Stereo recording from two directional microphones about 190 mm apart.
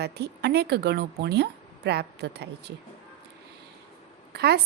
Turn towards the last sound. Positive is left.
turn(degrees=-60)  # may be behind; listen again after turning